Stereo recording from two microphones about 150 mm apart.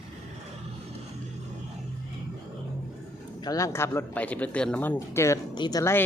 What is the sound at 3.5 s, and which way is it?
Speech, 20° left (ahead or behind).